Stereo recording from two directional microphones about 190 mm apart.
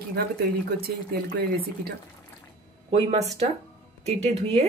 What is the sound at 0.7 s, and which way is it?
Speech, 55° right (ahead or behind).